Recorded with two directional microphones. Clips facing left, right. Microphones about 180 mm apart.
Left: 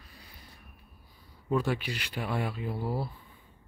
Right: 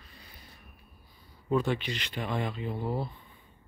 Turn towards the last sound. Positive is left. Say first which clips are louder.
# even
turn(degrees=5)  # may be behind; listen again after turning